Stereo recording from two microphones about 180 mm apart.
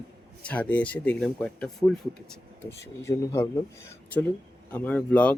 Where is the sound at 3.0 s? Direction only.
15° left (ahead or behind).